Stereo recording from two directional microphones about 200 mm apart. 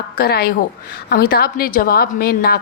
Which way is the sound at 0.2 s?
50° left (ahead or behind).